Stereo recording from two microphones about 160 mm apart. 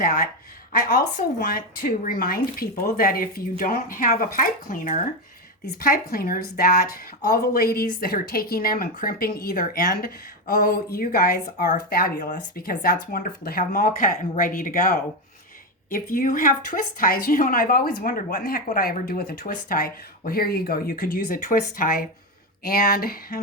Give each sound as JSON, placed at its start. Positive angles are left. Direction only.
{"t": 0.0, "sound": "speech", "side_deg": 60}
{"t": 5.8, "sound": "speech", "side_deg": 65}